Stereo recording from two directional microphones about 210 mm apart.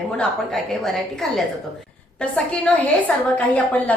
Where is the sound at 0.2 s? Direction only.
Centre (ahead or behind).